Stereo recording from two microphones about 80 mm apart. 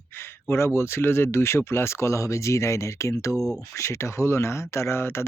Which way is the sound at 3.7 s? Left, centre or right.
Left.